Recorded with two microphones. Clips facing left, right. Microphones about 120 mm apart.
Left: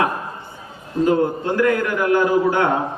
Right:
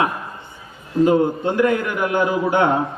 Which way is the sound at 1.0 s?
20° right (ahead or behind).